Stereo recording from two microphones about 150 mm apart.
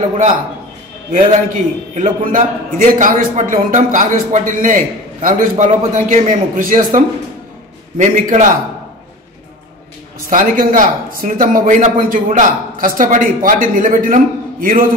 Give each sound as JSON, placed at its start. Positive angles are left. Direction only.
{"t": 1.1, "sound": "speech", "side_deg": -60}
{"t": 8.0, "sound": "speech", "side_deg": -60}
{"t": 10.3, "sound": "speech", "side_deg": -65}